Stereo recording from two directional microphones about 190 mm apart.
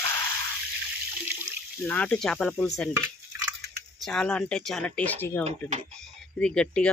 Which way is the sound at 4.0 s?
5° left (ahead or behind).